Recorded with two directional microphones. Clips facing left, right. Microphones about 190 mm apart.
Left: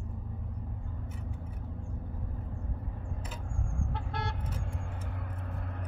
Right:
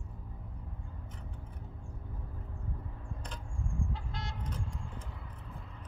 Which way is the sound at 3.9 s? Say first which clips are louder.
Left 6 dB; 60° left (ahead or behind).